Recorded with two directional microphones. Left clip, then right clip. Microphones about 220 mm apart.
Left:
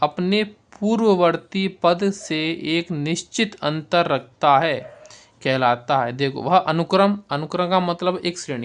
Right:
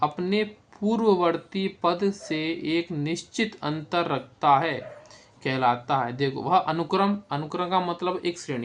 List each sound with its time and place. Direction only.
0.0 s speech: 45° left (ahead or behind)